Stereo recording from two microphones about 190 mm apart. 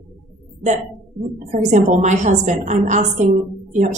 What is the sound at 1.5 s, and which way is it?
A woman's voice, 40° right (ahead or behind).